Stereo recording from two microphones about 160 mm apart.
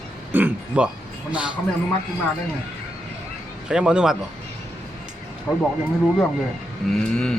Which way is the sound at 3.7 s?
5° right (ahead or behind).